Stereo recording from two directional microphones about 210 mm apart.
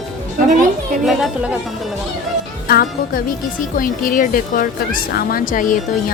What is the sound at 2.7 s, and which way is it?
Speech, 45° left (ahead or behind).